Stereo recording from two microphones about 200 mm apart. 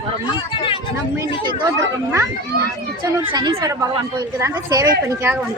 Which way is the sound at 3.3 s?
20° right (ahead or behind).